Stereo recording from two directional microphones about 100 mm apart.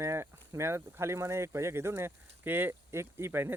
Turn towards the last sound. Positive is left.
turn(degrees=-25)  # may be behind; listen again after turning